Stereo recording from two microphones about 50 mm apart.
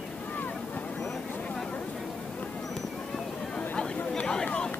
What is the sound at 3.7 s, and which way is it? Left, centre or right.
Chatter, centre.